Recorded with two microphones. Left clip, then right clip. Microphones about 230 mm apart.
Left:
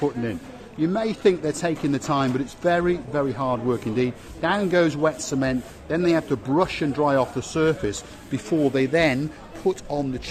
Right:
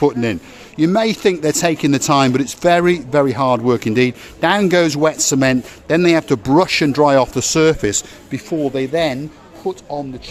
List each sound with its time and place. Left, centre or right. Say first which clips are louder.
0.0 s speech: right 9 dB; right
8.4 s speech: right 2 dB; centre